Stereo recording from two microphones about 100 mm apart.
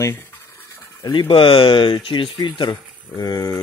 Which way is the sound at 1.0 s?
55° left (ahead or behind).